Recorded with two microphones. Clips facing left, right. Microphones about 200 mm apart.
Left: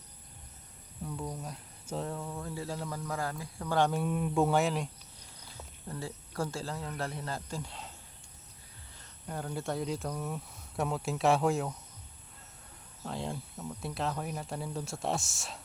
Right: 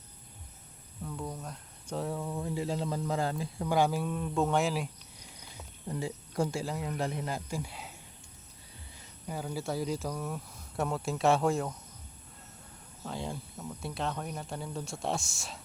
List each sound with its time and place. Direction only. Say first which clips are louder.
1.0 s speech: even; centre (ahead or behind); by 3.8 s 25° right (ahead or behind)
3.8 s speech: right 1 dB; 5° right (ahead or behind)
4.0 s speech: left 2 dB; 10° left (ahead or behind)
5.4 s speech: right 1 dB; 15° right (ahead or behind)
9.2 s speech: right 1 dB; 5° right (ahead or behind)
13.1 s speech: even; centre (ahead or behind)